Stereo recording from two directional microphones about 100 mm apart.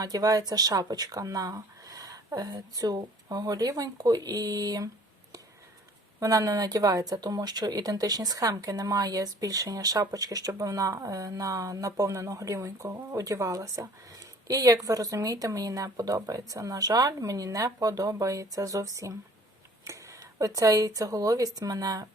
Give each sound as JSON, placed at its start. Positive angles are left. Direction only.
{"t": 0.0, "sound": "speech", "side_deg": -40}
{"t": 6.1, "sound": "speech", "side_deg": -35}